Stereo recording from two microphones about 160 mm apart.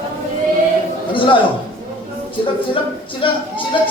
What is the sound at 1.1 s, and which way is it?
Speech, 30° left (ahead or behind).